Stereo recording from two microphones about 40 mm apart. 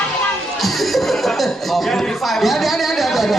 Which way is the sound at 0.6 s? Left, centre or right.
Centre.